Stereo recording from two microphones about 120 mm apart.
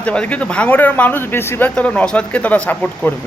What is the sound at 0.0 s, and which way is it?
Speech, 10° left (ahead or behind).